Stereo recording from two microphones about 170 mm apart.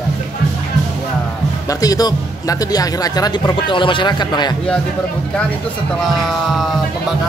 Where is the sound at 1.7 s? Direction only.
20° left (ahead or behind).